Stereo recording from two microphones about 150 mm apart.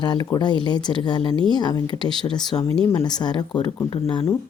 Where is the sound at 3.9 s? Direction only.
40° left (ahead or behind).